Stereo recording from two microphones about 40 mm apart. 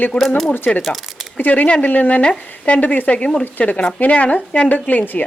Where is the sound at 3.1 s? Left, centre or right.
Left.